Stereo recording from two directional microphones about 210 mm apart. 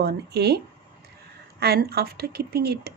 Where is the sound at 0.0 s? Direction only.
50° right (ahead or behind).